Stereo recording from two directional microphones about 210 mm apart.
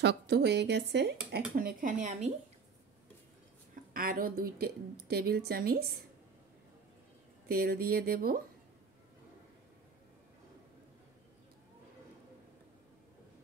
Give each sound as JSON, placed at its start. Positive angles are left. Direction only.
{"t": 0.0, "sound": "a woman's voice", "side_deg": -50}
{"t": 1.5, "sound": "speech", "side_deg": -40}
{"t": 3.7, "sound": "a woman's voice", "side_deg": -45}
{"t": 7.4, "sound": "a woman's voice", "side_deg": -45}